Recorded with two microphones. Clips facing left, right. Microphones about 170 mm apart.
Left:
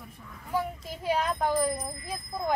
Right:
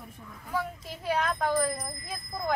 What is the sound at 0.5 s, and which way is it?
Speech, 15° left (ahead or behind).